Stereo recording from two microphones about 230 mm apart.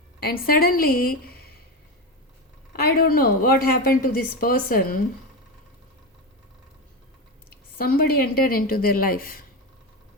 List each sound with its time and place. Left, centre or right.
0.2 s a woman's voice: left
2.7 s a woman's voice: left
7.5 s a woman's voice: left